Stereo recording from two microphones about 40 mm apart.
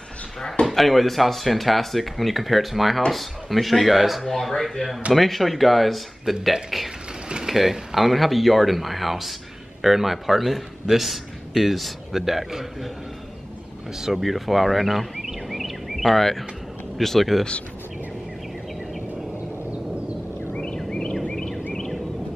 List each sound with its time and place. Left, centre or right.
0.7 s a man's voice: centre
14.0 s speech: centre
20.5 s a sound: left